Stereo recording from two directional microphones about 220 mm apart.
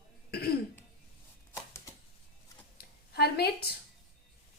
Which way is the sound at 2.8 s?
45° left (ahead or behind).